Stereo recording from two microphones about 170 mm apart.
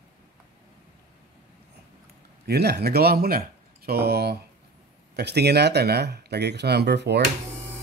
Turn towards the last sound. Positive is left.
turn(degrees=-85)